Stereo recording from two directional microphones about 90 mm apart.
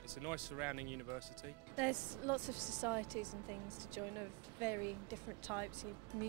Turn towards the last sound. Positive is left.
turn(degrees=-45)  # may be behind; listen again after turning